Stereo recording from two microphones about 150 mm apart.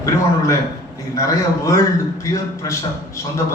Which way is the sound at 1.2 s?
20° left (ahead or behind).